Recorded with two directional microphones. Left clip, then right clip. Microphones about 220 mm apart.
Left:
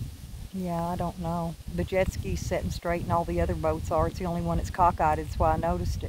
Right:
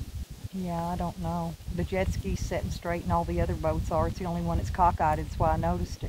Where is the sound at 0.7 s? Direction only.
45° left (ahead or behind).